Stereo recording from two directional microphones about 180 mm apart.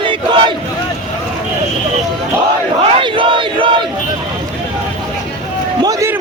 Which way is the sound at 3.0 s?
30° right (ahead or behind).